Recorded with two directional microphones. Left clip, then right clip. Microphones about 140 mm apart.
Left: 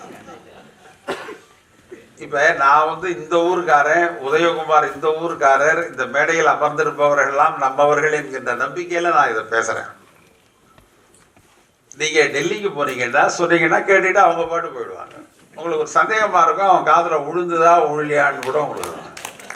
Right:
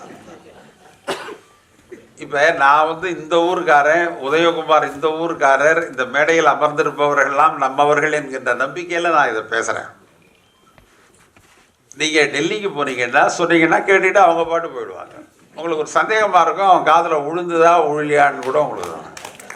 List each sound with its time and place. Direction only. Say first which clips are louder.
2.1 s speech: right 1 dB; 25° right (ahead or behind)
11.9 s speech: right 1 dB; 25° right (ahead or behind)